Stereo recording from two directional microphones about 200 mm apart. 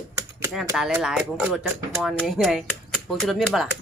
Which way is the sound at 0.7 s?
5° right (ahead or behind).